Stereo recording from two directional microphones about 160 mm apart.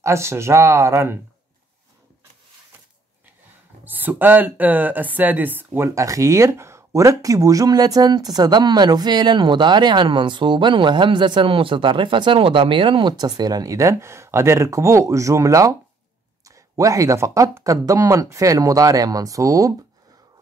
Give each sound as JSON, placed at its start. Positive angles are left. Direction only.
{"t": 0.0, "sound": "speech", "side_deg": -15}
{"t": 3.8, "sound": "speech", "side_deg": -10}